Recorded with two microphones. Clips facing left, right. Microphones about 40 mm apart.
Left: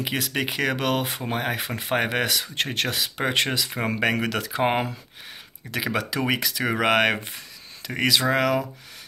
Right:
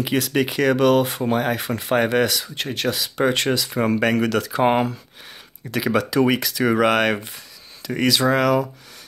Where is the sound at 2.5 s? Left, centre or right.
Left.